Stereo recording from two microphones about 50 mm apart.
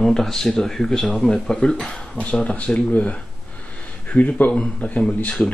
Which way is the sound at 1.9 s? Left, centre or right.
Left.